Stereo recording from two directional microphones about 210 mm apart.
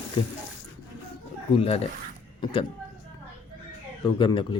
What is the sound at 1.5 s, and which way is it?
Speech, 30° left (ahead or behind).